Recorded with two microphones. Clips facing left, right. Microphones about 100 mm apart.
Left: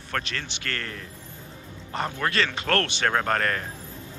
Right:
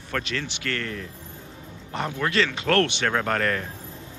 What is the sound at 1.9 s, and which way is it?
Speech, 5° right (ahead or behind).